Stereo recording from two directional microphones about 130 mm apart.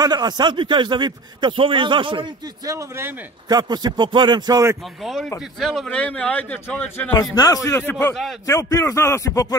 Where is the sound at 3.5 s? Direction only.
30° right (ahead or behind).